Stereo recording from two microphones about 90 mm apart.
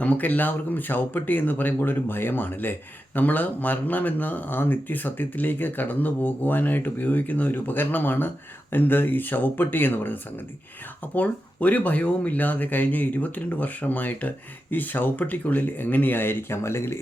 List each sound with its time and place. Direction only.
0.0 s speech: 15° left (ahead or behind)